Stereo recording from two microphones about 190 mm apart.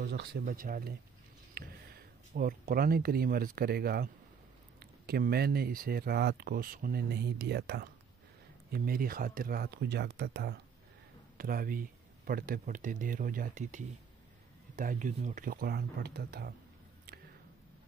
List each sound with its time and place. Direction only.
0.0 s speech: 60° right (ahead or behind)